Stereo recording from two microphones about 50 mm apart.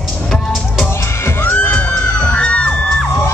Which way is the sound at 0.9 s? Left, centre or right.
Left.